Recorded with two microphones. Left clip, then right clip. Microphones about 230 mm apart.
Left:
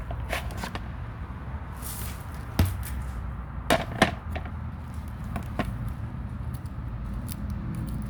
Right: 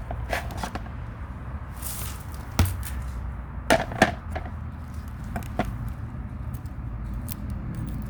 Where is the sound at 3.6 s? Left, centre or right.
Centre.